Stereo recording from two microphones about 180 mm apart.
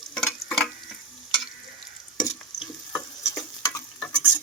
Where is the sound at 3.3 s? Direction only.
20° left (ahead or behind).